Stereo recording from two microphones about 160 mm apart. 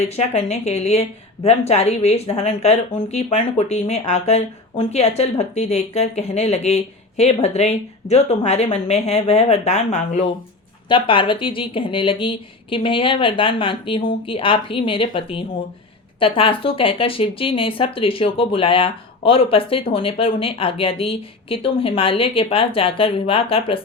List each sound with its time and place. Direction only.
0.0 s a woman's voice: 40° left (ahead or behind)
10.8 s speech: 30° left (ahead or behind)